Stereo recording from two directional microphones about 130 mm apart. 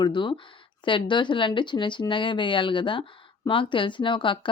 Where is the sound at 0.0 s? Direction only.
35° left (ahead or behind).